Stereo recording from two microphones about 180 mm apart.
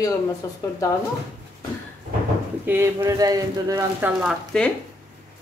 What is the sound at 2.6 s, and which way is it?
Speech, 10° right (ahead or behind).